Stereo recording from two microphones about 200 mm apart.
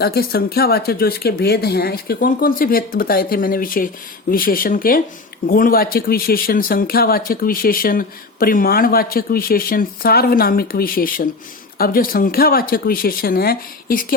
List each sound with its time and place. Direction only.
0.0 s speech: 50° left (ahead or behind)